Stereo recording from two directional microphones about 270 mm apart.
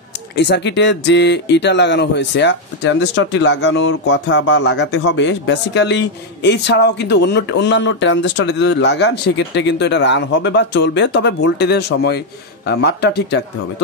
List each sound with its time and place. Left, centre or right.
0.4 s speech: left